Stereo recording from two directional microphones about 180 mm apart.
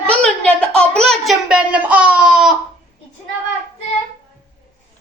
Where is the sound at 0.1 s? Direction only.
5° left (ahead or behind).